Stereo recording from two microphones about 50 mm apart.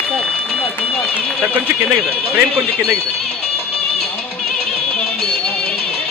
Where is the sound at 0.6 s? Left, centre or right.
Centre.